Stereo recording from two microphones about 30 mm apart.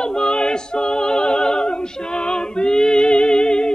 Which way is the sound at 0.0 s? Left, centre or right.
Left.